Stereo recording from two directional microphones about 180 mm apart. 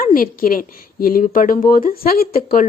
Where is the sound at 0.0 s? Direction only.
50° left (ahead or behind).